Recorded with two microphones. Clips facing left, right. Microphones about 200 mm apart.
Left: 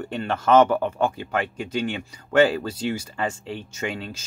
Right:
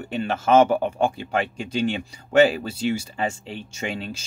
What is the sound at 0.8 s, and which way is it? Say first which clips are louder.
Speech: right 1 dB; 25° right (ahead or behind).